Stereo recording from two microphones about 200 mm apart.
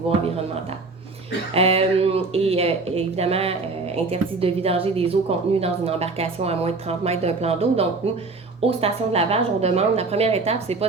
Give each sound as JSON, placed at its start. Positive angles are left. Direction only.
{"t": 1.5, "sound": "speech", "side_deg": -30}